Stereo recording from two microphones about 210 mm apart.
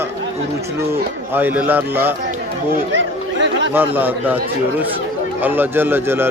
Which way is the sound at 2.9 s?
60° right (ahead or behind).